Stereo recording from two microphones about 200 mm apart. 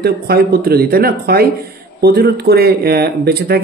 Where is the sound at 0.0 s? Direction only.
50° right (ahead or behind).